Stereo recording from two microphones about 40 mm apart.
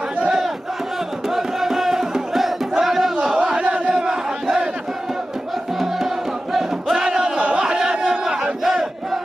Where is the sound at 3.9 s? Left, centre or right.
Centre.